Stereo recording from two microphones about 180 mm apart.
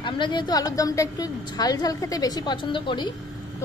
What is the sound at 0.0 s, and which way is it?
A woman's voice, 25° left (ahead or behind).